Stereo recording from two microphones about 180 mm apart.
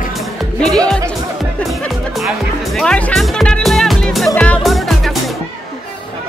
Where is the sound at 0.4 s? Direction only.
Centre (ahead or behind).